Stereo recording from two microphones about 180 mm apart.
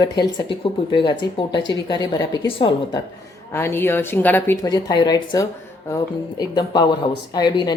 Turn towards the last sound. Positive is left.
turn(degrees=25)  # may be behind; listen again after turning